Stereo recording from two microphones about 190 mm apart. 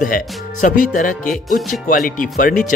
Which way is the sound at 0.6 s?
45° left (ahead or behind).